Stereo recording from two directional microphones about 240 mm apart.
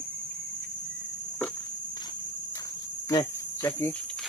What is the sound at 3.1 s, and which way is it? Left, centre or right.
Speech, centre.